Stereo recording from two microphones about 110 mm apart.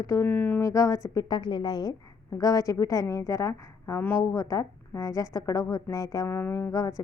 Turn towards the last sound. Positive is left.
turn(degrees=30)  # may be behind; listen again after turning